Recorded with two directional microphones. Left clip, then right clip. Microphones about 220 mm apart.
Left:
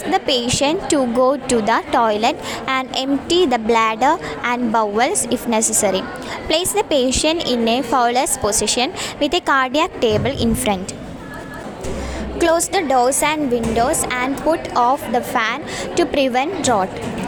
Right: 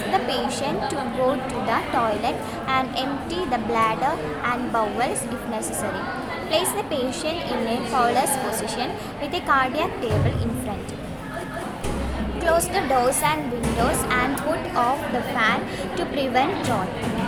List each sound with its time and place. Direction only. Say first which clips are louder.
0.1 s a woman's voice: left 6 dB; 40° left (ahead or behind)
12.4 s a woman's voice: left 5 dB; 35° left (ahead or behind)